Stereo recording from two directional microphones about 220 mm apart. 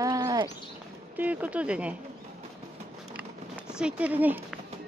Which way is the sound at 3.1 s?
5° right (ahead or behind).